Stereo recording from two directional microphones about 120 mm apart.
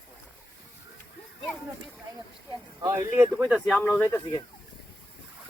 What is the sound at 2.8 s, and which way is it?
Speech, 20° right (ahead or behind).